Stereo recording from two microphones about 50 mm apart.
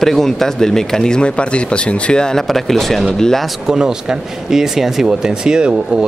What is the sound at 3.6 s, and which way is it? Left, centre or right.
Speech, centre.